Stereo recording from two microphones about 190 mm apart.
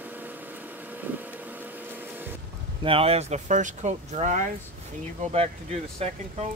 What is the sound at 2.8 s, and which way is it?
Speech, 30° right (ahead or behind).